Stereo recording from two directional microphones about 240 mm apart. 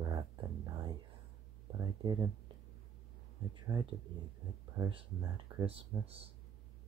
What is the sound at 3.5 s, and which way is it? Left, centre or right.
Speech, centre.